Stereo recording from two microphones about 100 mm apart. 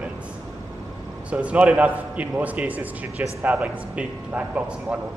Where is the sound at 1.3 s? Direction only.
15° right (ahead or behind).